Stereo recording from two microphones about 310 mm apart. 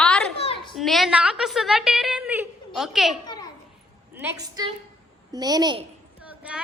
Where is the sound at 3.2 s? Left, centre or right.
Centre.